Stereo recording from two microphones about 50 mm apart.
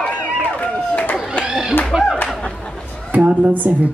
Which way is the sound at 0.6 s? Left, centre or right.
Left.